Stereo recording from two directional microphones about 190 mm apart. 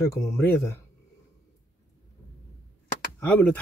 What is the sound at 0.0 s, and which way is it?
Speech, 15° left (ahead or behind).